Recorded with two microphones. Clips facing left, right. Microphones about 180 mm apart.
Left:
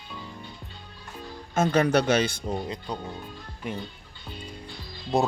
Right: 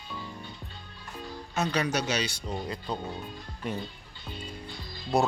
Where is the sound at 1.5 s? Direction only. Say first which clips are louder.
Left 7 dB; 50° left (ahead or behind).